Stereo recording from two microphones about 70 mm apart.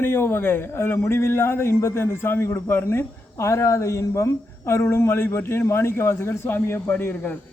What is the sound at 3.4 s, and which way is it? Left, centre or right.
A woman's voice, left.